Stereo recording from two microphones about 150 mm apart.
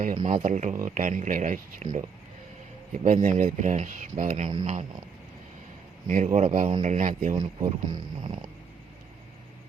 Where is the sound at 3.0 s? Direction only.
55° right (ahead or behind).